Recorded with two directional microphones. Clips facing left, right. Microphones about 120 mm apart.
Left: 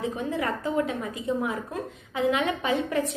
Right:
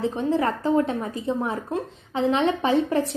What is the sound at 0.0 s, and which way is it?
A woman's voice, 30° right (ahead or behind).